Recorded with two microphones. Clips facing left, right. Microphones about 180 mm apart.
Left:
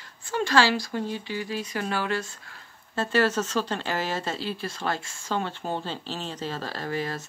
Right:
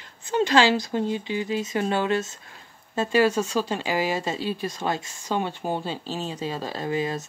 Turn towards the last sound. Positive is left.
turn(degrees=-20)  # may be behind; listen again after turning